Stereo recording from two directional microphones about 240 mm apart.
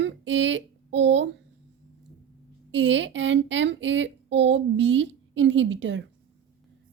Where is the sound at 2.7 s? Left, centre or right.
Right.